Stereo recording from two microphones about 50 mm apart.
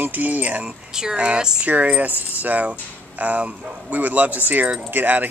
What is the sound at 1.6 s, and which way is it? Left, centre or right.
Speech, right.